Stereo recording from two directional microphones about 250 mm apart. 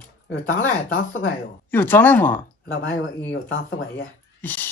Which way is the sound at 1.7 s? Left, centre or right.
Centre.